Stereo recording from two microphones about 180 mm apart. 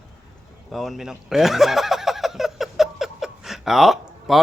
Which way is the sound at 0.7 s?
Centre (ahead or behind).